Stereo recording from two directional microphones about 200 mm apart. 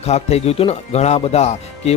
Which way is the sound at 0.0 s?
30° left (ahead or behind).